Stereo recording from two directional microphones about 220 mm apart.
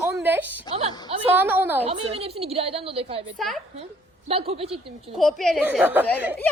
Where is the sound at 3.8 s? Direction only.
25° right (ahead or behind).